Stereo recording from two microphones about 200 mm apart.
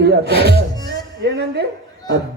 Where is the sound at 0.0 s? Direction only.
55° right (ahead or behind).